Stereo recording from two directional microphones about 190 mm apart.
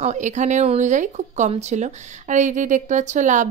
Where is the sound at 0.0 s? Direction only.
40° right (ahead or behind).